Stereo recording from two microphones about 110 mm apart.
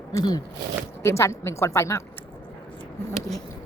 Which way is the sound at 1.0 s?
25° left (ahead or behind).